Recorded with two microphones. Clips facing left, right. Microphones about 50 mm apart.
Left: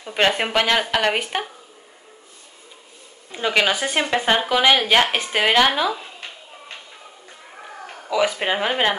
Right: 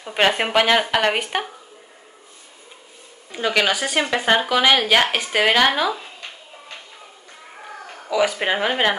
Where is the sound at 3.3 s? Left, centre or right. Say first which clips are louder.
Even; centre.